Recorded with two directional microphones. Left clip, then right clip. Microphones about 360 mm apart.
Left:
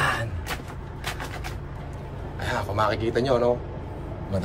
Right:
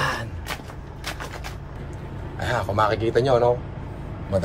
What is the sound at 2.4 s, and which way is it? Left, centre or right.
Speech, centre.